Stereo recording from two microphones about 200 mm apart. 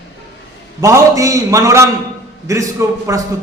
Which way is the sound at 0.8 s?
15° right (ahead or behind).